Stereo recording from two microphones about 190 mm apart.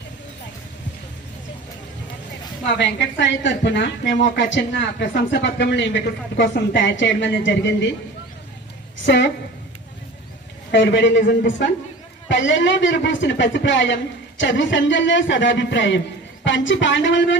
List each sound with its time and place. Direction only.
2.6 s a woman's voice: 70° left (ahead or behind)
9.0 s a woman's voice: 70° left (ahead or behind)
10.7 s a woman's voice: 70° left (ahead or behind)